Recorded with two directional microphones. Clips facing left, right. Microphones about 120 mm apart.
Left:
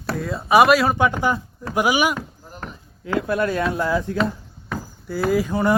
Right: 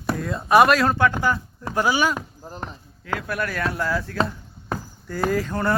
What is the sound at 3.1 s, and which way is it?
Speech, 25° left (ahead or behind).